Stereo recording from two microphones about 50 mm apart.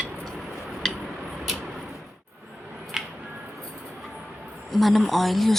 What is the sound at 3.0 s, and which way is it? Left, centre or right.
Music, centre.